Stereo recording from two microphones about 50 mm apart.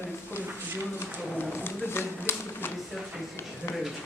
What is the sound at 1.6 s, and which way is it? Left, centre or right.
Speech, left.